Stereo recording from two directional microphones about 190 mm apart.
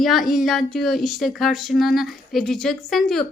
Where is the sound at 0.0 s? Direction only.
Centre (ahead or behind).